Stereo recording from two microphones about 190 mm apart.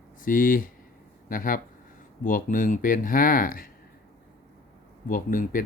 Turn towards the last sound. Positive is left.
turn(degrees=45)  # may be behind; listen again after turning